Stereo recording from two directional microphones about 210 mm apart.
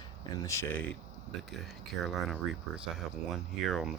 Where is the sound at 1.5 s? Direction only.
Centre (ahead or behind).